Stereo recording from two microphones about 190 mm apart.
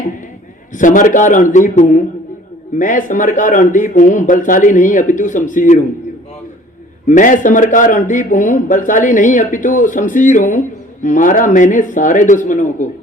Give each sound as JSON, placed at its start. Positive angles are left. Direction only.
{"t": 0.7, "sound": "a man's voice", "side_deg": 40}
{"t": 7.1, "sound": "a man's voice", "side_deg": 40}